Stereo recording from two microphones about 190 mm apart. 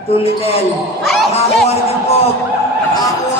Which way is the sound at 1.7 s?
35° left (ahead or behind).